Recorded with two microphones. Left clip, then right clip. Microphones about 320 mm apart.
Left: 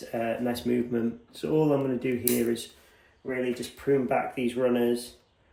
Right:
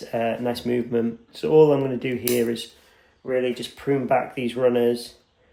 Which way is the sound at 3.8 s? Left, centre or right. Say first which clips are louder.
Right 4 dB; right.